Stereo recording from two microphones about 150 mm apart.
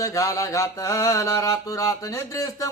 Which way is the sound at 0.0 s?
20° left (ahead or behind).